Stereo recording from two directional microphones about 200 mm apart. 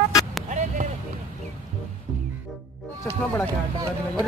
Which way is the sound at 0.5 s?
40° right (ahead or behind).